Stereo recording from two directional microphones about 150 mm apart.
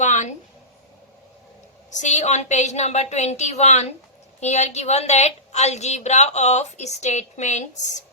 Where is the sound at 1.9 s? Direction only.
55° left (ahead or behind).